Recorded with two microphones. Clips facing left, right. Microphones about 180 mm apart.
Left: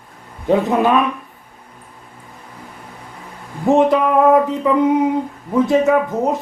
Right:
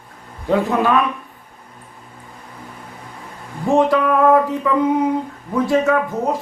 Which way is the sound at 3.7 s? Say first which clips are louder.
Left 2 dB; 20° left (ahead or behind).